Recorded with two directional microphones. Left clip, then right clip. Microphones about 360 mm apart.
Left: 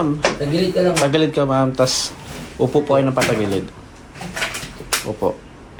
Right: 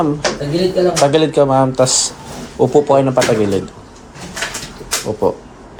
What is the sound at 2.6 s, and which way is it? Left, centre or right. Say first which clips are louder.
Speech: right 5 dB; centre.